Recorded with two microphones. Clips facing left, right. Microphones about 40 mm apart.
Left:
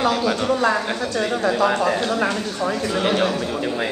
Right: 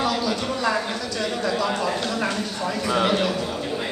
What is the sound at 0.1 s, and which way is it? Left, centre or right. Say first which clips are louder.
A woman's voice: left 5 dB; left.